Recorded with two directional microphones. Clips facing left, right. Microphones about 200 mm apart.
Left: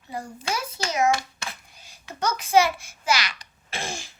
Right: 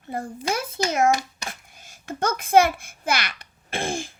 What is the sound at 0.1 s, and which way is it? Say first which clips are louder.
A child's voice: right 3 dB; 55° right (ahead or behind).